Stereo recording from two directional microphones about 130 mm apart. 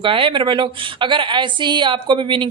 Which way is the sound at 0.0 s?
40° right (ahead or behind).